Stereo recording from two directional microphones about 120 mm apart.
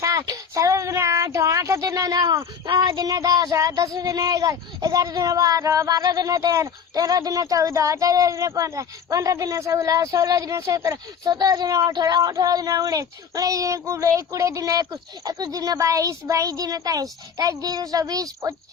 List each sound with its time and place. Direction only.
0.0 s child singing: 30° right (ahead or behind)
11.9 s speech: 35° right (ahead or behind)